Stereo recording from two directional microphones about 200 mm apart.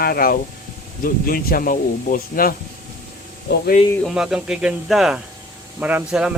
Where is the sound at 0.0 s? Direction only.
50° left (ahead or behind).